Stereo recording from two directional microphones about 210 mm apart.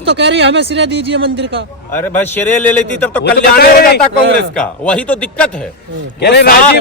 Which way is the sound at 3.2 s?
45° left (ahead or behind).